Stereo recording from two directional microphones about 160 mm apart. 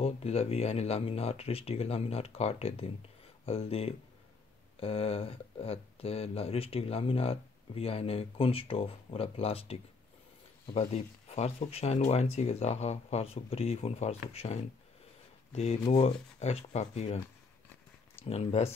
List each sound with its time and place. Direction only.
0.0 s speech: 40° left (ahead or behind)
18.2 s speech: 40° left (ahead or behind)